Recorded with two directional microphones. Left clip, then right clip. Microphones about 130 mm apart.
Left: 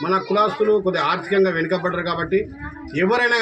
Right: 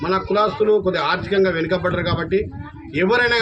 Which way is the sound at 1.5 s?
30° right (ahead or behind).